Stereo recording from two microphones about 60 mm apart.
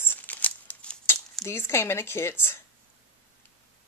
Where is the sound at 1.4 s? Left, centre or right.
Left.